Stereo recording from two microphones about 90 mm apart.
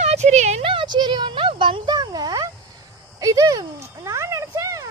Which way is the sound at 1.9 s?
50° right (ahead or behind).